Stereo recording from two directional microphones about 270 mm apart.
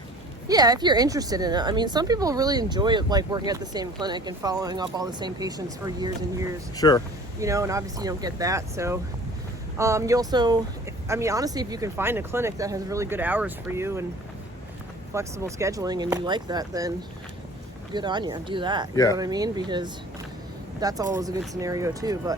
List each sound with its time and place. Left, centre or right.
0.4 s speech: centre
6.7 s speech: centre
7.3 s speech: centre
15.1 s speech: centre
17.9 s speech: centre